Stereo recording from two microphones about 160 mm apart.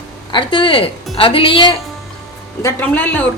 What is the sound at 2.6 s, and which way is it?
Speech, 10° left (ahead or behind).